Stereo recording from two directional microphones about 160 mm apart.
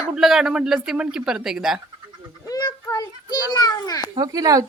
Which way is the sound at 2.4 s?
20° left (ahead or behind).